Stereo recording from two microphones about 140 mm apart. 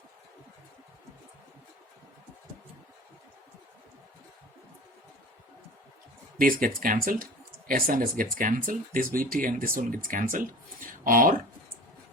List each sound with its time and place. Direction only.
6.4 s speech: 85° right